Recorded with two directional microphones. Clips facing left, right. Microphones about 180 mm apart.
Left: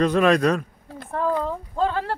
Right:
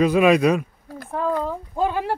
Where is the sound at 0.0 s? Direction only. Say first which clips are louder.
Right 2 dB; 10° right (ahead or behind).